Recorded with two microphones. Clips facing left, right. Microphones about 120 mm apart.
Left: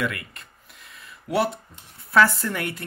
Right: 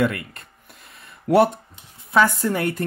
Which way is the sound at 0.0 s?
40° right (ahead or behind).